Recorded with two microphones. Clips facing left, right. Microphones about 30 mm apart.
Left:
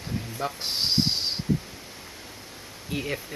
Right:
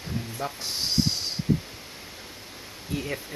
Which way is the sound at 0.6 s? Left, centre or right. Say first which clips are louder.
Left 2 dB; left.